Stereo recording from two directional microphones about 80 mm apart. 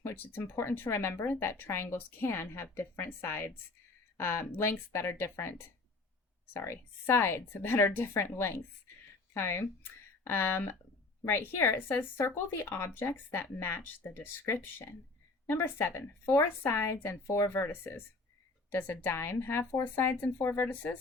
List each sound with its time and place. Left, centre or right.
0.0 s speech: left